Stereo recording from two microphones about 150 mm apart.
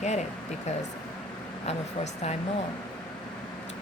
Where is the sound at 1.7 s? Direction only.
50° left (ahead or behind).